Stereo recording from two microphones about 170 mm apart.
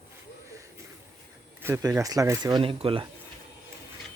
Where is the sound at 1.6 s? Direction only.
15° right (ahead or behind); by 3.0 s 30° right (ahead or behind).